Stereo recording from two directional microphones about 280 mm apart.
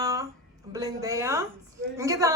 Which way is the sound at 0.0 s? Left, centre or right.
Centre.